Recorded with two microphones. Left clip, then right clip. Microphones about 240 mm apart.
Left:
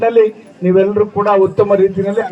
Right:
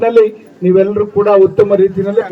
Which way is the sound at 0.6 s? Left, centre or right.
Centre.